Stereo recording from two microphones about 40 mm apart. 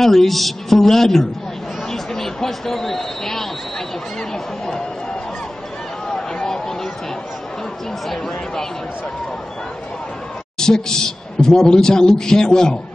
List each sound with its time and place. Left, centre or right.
0.0 s a man's voice: centre
6.0 s a sound: centre
10.6 s a man's voice: centre